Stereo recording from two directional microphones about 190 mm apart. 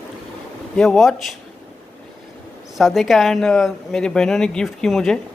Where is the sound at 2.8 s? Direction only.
Centre (ahead or behind).